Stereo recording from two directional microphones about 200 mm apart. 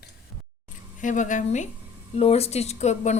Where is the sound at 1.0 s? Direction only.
40° left (ahead or behind).